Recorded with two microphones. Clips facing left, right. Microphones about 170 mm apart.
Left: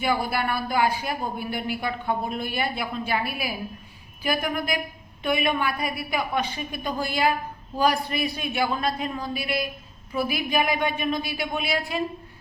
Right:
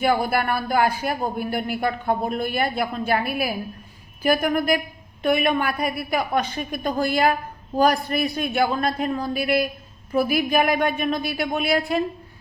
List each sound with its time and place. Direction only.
0.0 s speech: 50° right (ahead or behind)